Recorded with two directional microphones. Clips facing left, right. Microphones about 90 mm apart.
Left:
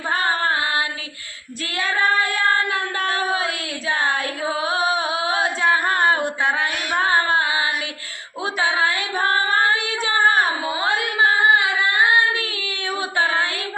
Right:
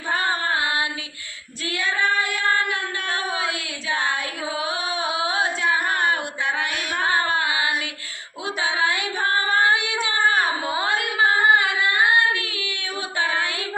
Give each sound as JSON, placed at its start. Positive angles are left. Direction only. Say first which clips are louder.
{"t": 1.8, "sound": "child singing", "louder": "left 3 dB", "side_deg": 40}
{"t": 3.8, "sound": "carnatic music", "louder": "left 3 dB", "side_deg": 35}
{"t": 5.7, "sound": "a sound", "louder": "left 3 dB", "side_deg": 30}
{"t": 9.1, "sound": "female singing", "louder": "left 3 dB", "side_deg": 40}
{"t": 9.8, "sound": "child singing", "louder": "left 3 dB", "side_deg": 35}
{"t": 10.8, "sound": "singing", "louder": "left 1 dB", "side_deg": 30}
{"t": 13.1, "sound": "child singing", "louder": "left 3 dB", "side_deg": 30}